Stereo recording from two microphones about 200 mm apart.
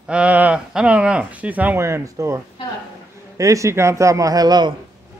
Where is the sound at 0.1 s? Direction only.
5° right (ahead or behind).